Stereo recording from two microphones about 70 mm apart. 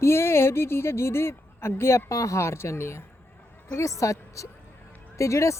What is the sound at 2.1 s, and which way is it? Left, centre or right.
Speech, left.